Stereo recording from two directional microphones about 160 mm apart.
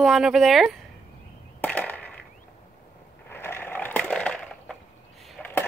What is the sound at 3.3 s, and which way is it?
Crushing, 15° left (ahead or behind).